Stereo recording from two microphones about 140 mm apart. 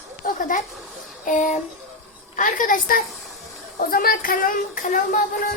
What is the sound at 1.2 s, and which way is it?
A woman's voice, 70° left (ahead or behind).